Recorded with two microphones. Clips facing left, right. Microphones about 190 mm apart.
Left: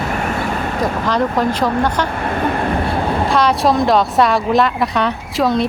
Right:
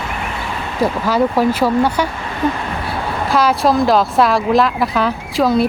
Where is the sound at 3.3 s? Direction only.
5° right (ahead or behind).